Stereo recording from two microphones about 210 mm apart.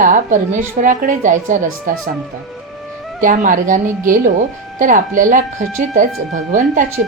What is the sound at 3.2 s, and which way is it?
Speech, 40° right (ahead or behind).